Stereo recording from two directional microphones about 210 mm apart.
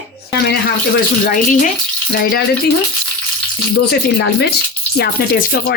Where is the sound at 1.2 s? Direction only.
40° left (ahead or behind).